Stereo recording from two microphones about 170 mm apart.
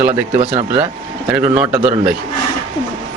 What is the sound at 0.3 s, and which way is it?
Speech, 40° right (ahead or behind).